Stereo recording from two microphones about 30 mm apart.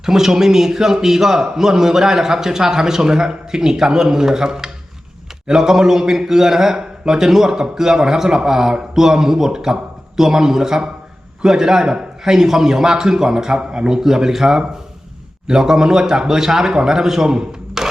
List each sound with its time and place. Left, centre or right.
0.0 s a man's voice: centre
13.9 s a man's voice: centre